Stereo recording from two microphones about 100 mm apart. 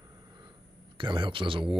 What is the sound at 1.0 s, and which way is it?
Speech, 55° right (ahead or behind).